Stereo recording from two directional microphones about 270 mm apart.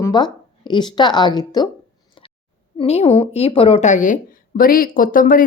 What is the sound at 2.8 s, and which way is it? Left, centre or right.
Speech, left.